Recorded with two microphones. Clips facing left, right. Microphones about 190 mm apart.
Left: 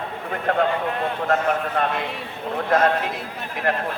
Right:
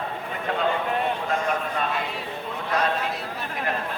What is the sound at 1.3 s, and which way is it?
Speech, 60° left (ahead or behind).